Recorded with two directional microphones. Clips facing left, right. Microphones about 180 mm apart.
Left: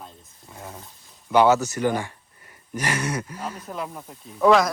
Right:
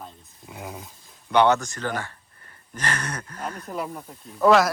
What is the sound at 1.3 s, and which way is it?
Speech, 5° left (ahead or behind).